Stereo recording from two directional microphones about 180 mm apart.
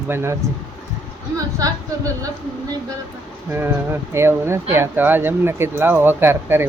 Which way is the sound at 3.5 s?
10° right (ahead or behind).